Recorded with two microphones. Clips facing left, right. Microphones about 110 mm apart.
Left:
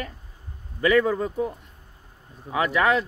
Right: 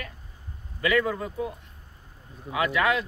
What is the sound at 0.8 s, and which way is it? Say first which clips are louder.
Speech: left 5 dB; 35° left (ahead or behind).